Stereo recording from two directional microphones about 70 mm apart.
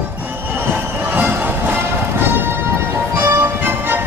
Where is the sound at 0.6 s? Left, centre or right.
Right.